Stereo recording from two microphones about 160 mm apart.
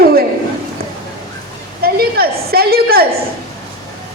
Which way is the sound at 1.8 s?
70° right (ahead or behind).